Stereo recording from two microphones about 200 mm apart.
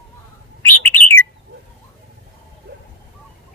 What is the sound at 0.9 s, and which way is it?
Bird, 10° left (ahead or behind).